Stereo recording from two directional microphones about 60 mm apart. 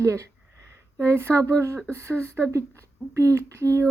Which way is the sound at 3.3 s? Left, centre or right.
Right.